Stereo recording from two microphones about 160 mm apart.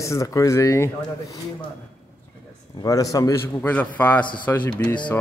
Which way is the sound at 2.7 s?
20° left (ahead or behind).